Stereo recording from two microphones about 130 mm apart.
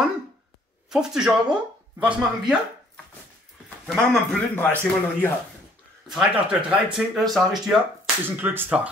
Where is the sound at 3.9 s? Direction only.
Centre (ahead or behind).